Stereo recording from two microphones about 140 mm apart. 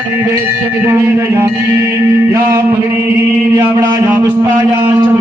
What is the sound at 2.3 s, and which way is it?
Speech, 20° right (ahead or behind).